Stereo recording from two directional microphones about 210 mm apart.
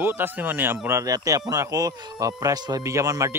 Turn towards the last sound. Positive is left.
turn(degrees=-15)  # may be behind; listen again after turning